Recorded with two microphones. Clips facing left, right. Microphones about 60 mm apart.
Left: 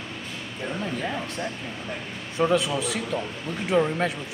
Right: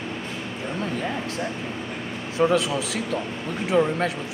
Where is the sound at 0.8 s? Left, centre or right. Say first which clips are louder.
Right 3 dB; centre.